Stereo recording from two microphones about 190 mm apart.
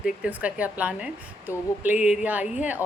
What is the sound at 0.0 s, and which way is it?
A woman's voice, 5° right (ahead or behind).